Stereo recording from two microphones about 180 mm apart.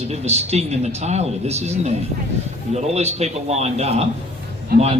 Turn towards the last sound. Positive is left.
turn(degrees=-60)  # may be behind; listen again after turning